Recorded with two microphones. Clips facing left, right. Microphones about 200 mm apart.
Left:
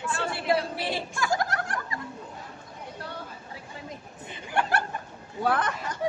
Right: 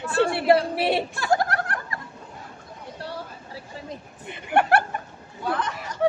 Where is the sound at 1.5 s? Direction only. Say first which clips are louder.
Right 3 dB; 60° right (ahead or behind).